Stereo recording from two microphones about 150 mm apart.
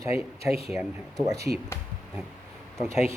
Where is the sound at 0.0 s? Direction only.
20° right (ahead or behind).